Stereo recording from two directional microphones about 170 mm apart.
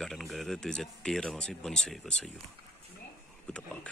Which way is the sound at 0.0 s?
Centre (ahead or behind).